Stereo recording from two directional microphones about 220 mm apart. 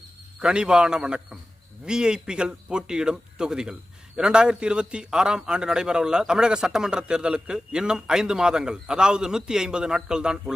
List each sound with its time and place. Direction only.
0.3 s a man's voice: 5° right (ahead or behind)